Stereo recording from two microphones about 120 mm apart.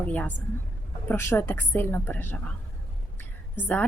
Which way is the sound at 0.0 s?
15° left (ahead or behind).